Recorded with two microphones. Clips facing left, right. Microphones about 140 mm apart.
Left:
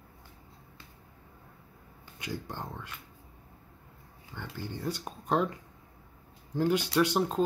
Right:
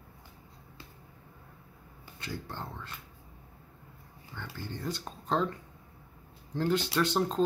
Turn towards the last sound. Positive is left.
turn(degrees=10)  # may be behind; listen again after turning